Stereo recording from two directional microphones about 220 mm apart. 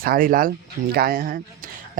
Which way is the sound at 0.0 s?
40° right (ahead or behind).